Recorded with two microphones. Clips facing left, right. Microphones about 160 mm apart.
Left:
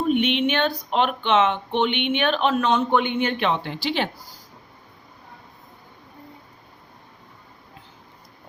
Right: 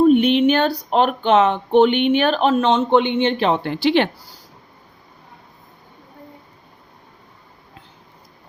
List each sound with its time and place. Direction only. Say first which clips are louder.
0.0 s speech: right 8 dB; 40° right (ahead or behind)
3.6 s speech: right 8 dB; 60° right (ahead or behind)